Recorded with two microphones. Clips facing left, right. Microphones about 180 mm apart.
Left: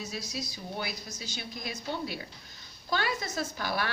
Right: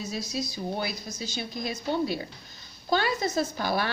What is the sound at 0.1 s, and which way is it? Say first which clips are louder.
A woman's voice: right 6 dB; 30° right (ahead or behind).